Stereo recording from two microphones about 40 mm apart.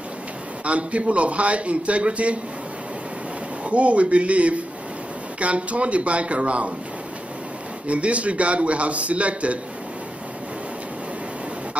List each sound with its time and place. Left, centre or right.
0.7 s a man's voice: right
3.6 s a man's voice: right
7.8 s a man's voice: right